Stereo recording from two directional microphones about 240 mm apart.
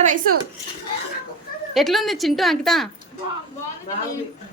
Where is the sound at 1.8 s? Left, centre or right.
Centre.